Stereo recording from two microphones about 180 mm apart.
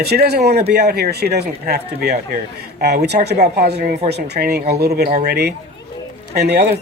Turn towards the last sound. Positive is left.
turn(degrees=-65)  # may be behind; listen again after turning